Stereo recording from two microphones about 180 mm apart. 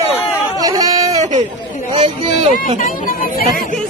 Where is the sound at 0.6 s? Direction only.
20° right (ahead or behind).